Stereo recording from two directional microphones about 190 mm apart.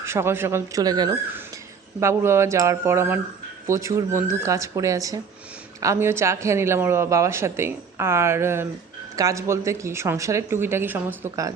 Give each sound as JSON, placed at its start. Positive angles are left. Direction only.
{"t": 0.0, "sound": "speech", "side_deg": -15}